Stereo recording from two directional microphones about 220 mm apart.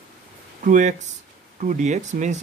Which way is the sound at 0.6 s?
35° right (ahead or behind).